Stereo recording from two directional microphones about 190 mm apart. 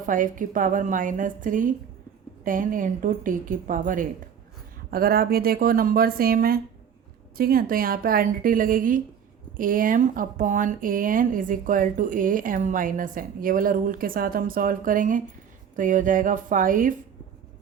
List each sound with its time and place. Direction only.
0.0 s speech: 45° right (ahead or behind)